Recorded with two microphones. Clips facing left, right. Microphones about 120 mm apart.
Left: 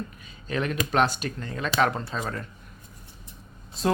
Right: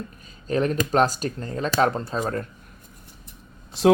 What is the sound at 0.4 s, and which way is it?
Speech, 40° right (ahead or behind).